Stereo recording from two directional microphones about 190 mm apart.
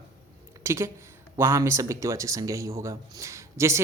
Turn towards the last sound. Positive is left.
turn(degrees=-15)  # may be behind; listen again after turning